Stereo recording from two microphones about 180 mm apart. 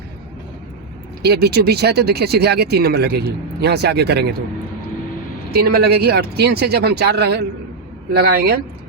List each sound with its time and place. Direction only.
1.2 s speech: 60° right (ahead or behind)
5.5 s speech: 55° right (ahead or behind)